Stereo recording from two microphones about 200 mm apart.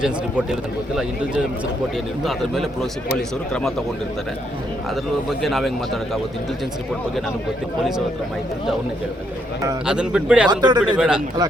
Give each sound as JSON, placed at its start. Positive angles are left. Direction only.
{"t": 3.2, "sound": "a man's voice", "side_deg": 5}
{"t": 5.4, "sound": "a man's voice", "side_deg": 0}
{"t": 9.8, "sound": "a man's voice", "side_deg": -5}
{"t": 10.5, "sound": "a man's voice", "side_deg": -20}
{"t": 10.8, "sound": "a man's voice", "side_deg": -5}